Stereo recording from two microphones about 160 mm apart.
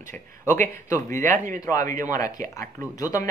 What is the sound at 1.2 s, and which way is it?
Speech, 55° right (ahead or behind).